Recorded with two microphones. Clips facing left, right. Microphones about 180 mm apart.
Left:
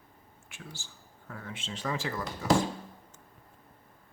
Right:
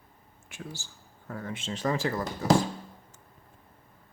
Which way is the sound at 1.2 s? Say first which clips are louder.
Right 6 dB; 40° right (ahead or behind).